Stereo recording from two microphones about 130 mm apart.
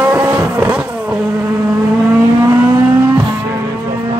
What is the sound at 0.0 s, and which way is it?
Vehicle, 20° right (ahead or behind).